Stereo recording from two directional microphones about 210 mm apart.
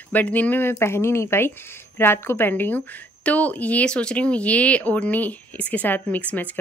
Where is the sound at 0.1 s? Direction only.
10° left (ahead or behind).